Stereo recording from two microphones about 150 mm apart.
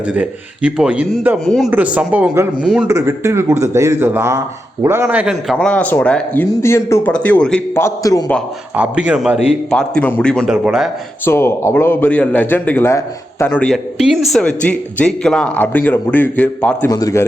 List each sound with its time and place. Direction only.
0.1 s speech: 5° right (ahead or behind)
1.5 s a man's voice: centre (ahead or behind)
1.7 s speech: 10° right (ahead or behind)
5.7 s speech: 10° left (ahead or behind)
7.8 s a man's voice: 20° left (ahead or behind)
8.7 s speech: 10° right (ahead or behind)
9.6 s a man's voice: 5° left (ahead or behind)
11.3 s speech: 15° left (ahead or behind)
14.0 s speech: centre (ahead or behind)
16.9 s a man's voice: 25° left (ahead or behind)